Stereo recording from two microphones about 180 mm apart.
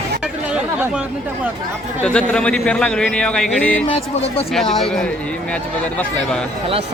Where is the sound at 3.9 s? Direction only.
35° left (ahead or behind).